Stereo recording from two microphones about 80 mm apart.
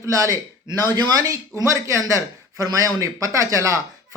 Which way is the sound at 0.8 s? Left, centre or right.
Right.